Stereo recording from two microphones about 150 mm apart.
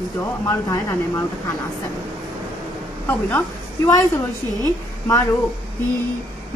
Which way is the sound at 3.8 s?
20° left (ahead or behind).